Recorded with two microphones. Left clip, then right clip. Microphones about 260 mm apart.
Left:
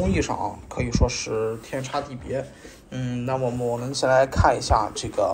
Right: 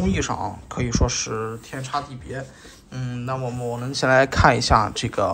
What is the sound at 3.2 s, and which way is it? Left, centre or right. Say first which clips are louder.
Speech: left 3 dB; right.